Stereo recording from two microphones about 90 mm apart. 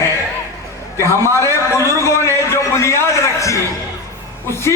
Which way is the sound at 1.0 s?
30° left (ahead or behind).